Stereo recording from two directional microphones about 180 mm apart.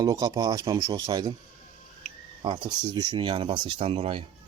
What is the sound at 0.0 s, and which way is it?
Speech, 20° right (ahead or behind).